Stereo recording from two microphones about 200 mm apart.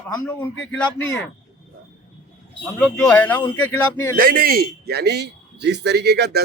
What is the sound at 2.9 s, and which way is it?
Speech, 5° left (ahead or behind).